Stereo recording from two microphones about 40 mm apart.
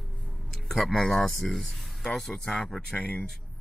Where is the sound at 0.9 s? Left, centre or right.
Centre.